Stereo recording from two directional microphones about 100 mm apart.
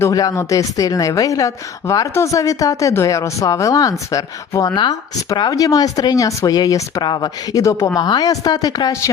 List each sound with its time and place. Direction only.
0.1 s a woman's voice: 40° left (ahead or behind)
4.7 s speech: 50° left (ahead or behind)
5.4 s a woman's voice: 35° left (ahead or behind)
7.0 s speech: 45° left (ahead or behind)
7.6 s speech: 30° left (ahead or behind)
7.9 s a woman's voice: 45° left (ahead or behind)